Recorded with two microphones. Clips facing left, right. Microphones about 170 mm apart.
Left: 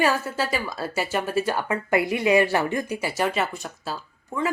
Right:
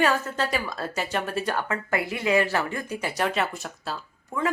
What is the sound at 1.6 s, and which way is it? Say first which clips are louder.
Speech: left 5 dB; 15° left (ahead or behind).